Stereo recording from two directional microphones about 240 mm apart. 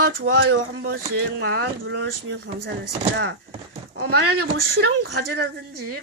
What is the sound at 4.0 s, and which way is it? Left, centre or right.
A woman's voice, right.